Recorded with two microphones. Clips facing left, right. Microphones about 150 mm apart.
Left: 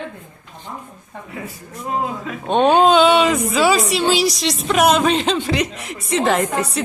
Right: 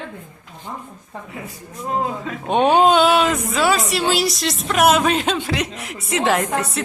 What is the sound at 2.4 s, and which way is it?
A woman's voice, 10° right (ahead or behind).